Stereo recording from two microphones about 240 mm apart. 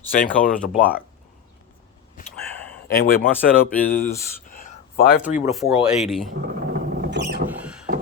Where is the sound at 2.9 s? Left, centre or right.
Left.